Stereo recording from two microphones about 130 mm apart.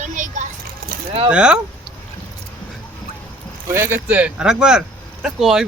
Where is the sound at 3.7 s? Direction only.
15° right (ahead or behind).